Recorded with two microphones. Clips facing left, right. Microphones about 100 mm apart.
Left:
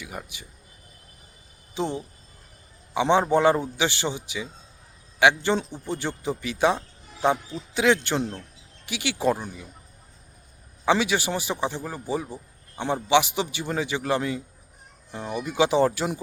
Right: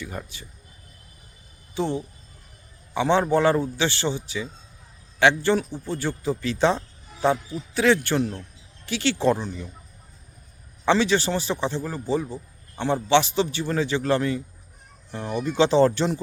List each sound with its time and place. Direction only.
0.0 s a man's voice: 10° left (ahead or behind)
1.7 s a man's voice: 15° left (ahead or behind)
10.8 s a man's voice: 10° left (ahead or behind)